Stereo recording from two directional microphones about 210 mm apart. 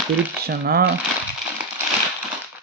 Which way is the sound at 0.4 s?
45° right (ahead or behind).